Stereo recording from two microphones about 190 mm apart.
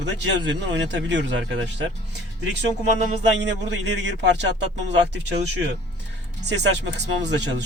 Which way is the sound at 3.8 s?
65° right (ahead or behind).